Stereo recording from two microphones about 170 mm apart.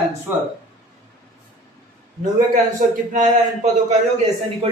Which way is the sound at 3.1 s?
45° right (ahead or behind).